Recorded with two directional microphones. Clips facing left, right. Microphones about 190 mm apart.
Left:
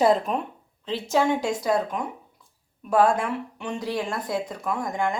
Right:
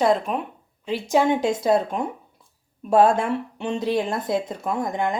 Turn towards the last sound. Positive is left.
turn(degrees=-20)  # may be behind; listen again after turning